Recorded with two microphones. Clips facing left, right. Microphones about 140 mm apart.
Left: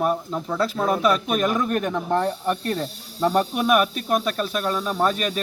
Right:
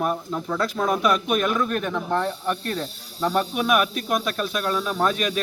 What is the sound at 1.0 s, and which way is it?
Speech, 35° left (ahead or behind).